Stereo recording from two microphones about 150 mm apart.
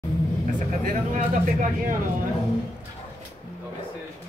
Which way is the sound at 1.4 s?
60° right (ahead or behind).